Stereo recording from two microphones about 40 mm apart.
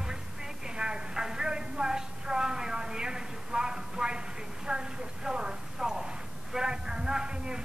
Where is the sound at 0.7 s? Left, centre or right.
Right.